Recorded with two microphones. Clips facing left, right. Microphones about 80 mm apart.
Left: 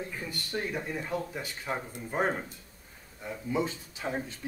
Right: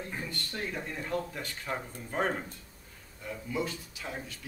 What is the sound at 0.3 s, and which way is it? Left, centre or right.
Speech, centre.